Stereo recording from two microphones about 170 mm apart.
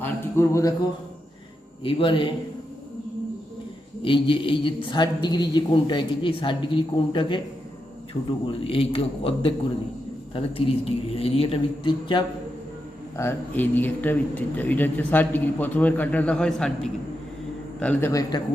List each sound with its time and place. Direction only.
0.0 s speech: 15° left (ahead or behind)
1.8 s a woman's voice: 30° left (ahead or behind)
4.0 s a woman's voice: 30° left (ahead or behind)
8.4 s speech: 30° left (ahead or behind)
13.1 s speech: 10° left (ahead or behind)
18.1 s a woman's voice: 20° left (ahead or behind)